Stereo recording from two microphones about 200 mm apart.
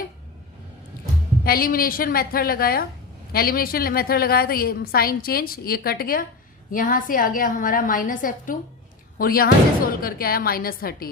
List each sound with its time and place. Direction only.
1.5 s a woman's voice: 45° left (ahead or behind)